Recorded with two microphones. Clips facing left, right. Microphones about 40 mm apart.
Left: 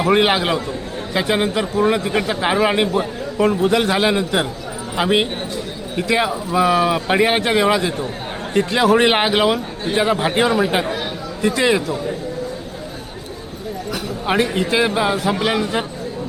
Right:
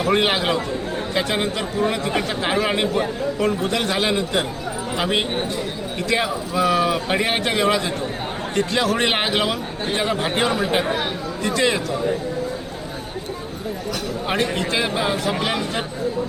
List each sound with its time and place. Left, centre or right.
0.0 s speech: centre
14.3 s speech: centre